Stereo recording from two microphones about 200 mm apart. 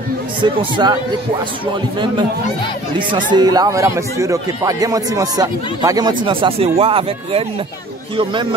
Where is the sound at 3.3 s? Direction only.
20° right (ahead or behind).